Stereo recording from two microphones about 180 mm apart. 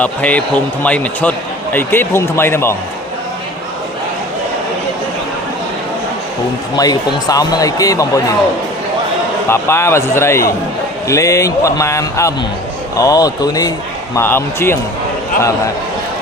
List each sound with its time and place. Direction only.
0.0 s speech: 5° left (ahead or behind)
6.7 s a man's voice: 20° left (ahead or behind)
9.5 s a man's voice: 15° left (ahead or behind)